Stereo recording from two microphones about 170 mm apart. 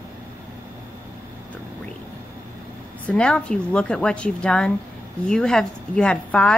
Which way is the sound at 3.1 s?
5° left (ahead or behind).